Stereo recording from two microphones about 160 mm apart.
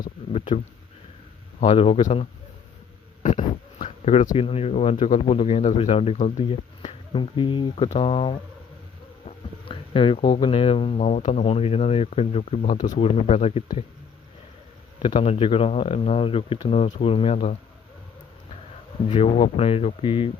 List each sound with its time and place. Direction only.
0.3 s speech: 40° left (ahead or behind)
1.6 s speech: 40° left (ahead or behind)
3.2 s a sound: 50° left (ahead or behind)
3.8 s speech: 45° left (ahead or behind)
14.9 s speech: 35° left (ahead or behind)
19.0 s speech: 40° left (ahead or behind)